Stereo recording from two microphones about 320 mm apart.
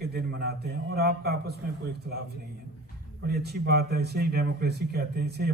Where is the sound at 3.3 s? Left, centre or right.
Right.